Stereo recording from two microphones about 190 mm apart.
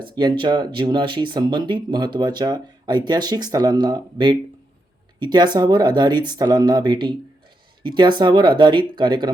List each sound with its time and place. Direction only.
0.0 s speech: 25° right (ahead or behind)